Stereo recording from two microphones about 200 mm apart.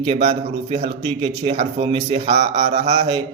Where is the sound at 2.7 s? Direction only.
25° right (ahead or behind).